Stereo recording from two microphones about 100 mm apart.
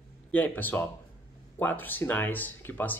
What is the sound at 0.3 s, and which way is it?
Speech, 15° left (ahead or behind).